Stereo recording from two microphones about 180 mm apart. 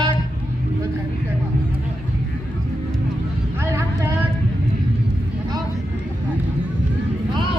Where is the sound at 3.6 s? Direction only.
15° right (ahead or behind).